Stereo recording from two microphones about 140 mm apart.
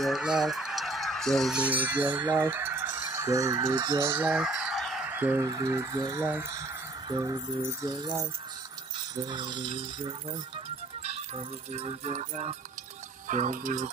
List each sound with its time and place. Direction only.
0.0 s fowl: 5° right (ahead or behind)
2.3 s speech: 15° right (ahead or behind)
4.1 s fowl: 10° right (ahead or behind)
5.5 s speech: 20° right (ahead or behind)
9.1 s speech: 30° right (ahead or behind)
11.0 s speech: 45° right (ahead or behind)
13.3 s speech: 65° right (ahead or behind)